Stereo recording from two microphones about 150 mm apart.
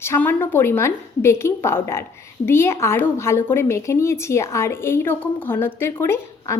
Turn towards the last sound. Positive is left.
turn(degrees=15)  # may be behind; listen again after turning